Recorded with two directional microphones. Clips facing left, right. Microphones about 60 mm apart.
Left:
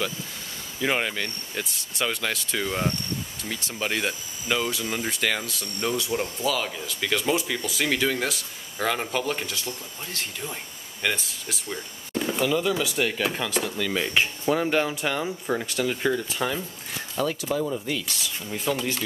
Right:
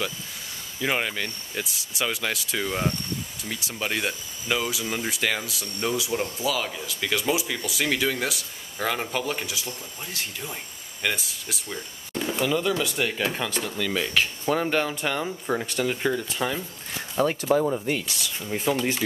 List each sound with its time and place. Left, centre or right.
0.7 s speech: centre
14.0 s speech: centre
14.5 s speech: centre
17.2 s speech: right
18.0 s speech: centre